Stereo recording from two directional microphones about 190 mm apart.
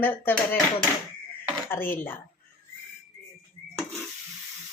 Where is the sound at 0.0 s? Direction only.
10° left (ahead or behind).